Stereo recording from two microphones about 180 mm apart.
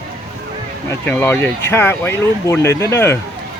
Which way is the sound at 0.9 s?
10° left (ahead or behind).